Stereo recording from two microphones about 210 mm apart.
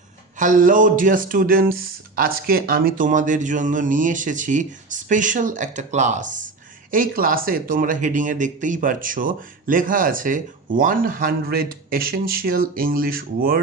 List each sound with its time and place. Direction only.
0.3 s speech: 40° right (ahead or behind)